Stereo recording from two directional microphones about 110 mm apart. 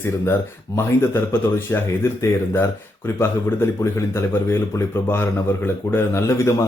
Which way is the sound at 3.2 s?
20° left (ahead or behind).